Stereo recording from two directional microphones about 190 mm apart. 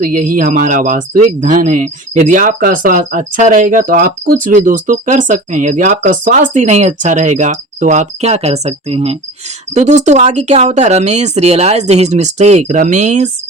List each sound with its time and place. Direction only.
0.0 s speech: 45° right (ahead or behind)